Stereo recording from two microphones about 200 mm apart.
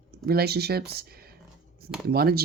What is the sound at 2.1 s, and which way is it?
Speech, 50° right (ahead or behind).